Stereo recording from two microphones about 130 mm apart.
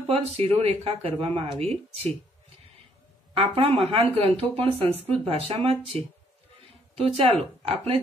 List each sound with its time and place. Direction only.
0.1 s a woman's voice: 45° right (ahead or behind)
3.3 s a woman's voice: 45° right (ahead or behind)